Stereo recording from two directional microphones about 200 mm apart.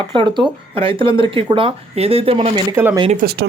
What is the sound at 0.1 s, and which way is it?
Speech, 25° right (ahead or behind).